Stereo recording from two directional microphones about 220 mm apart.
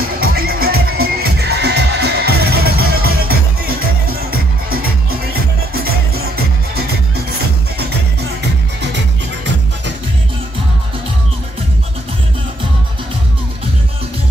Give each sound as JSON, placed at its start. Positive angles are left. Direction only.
{"t": 0.2, "sound": "music", "side_deg": -45}